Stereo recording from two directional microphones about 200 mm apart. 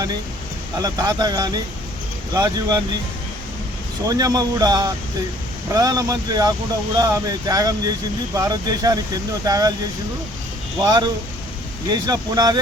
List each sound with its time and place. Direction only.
0.8 s speech: 20° right (ahead or behind)
4.0 s speech: 20° right (ahead or behind)
10.8 s speech: 20° right (ahead or behind)